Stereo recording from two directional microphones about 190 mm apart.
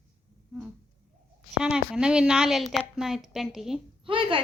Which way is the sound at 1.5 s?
5° right (ahead or behind).